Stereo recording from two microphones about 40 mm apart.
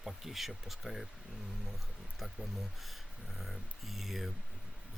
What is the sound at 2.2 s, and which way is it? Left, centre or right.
Speech, centre.